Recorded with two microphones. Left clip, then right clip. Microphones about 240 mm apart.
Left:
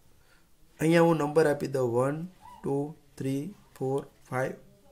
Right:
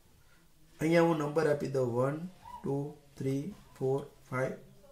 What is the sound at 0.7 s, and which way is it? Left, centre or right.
Speech, left.